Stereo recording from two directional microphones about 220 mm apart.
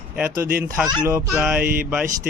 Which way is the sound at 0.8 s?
5° right (ahead or behind).